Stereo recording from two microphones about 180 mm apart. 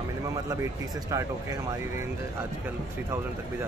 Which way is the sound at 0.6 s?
15° right (ahead or behind).